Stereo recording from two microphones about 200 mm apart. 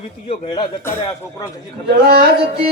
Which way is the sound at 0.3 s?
25° left (ahead or behind).